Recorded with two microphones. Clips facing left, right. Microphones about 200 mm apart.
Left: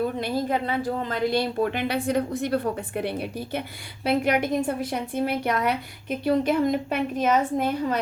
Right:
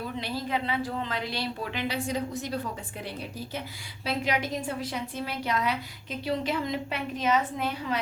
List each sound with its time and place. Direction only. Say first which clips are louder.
0.2 s a woman's voice: left 6 dB; 50° left (ahead or behind)